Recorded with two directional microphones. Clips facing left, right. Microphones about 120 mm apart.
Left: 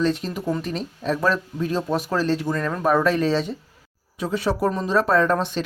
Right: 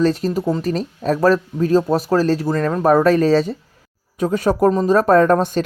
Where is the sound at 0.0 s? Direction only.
40° right (ahead or behind).